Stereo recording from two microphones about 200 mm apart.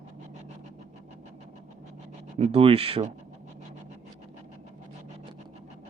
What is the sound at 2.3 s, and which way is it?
Speech, 30° right (ahead or behind).